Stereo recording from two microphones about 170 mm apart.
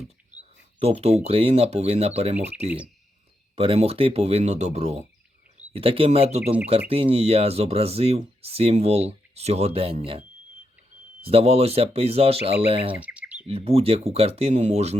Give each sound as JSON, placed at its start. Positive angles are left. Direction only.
{"t": 0.3, "sound": "speech", "side_deg": -40}
{"t": 3.5, "sound": "speech", "side_deg": -35}
{"t": 12.9, "sound": "chirp", "side_deg": -10}
{"t": 13.5, "sound": "speech", "side_deg": -35}